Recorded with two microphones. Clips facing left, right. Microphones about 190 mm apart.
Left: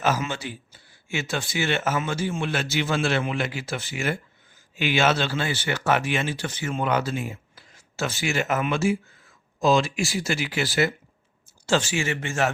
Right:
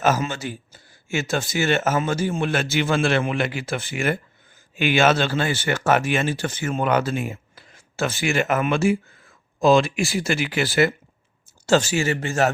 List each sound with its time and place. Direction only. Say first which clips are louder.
0.0 s speech: right 4 dB; 45° right (ahead or behind)
11.6 s speech: right 5 dB; 40° right (ahead or behind)